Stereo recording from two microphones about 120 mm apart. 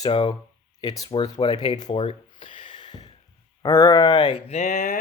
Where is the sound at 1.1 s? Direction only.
45° left (ahead or behind).